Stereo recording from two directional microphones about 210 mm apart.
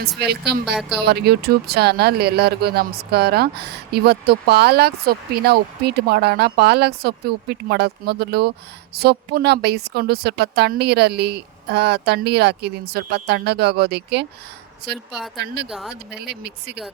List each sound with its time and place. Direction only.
0.2 s speech: 50° right (ahead or behind)
15.4 s speech: 50° right (ahead or behind)